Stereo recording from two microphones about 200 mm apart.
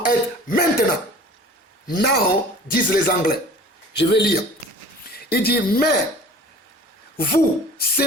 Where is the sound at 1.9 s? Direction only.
50° left (ahead or behind).